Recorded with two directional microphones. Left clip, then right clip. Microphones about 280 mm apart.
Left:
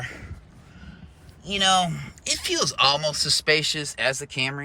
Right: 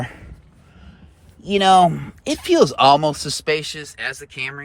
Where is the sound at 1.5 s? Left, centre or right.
Centre.